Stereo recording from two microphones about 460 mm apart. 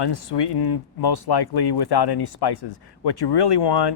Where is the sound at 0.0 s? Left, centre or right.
Left.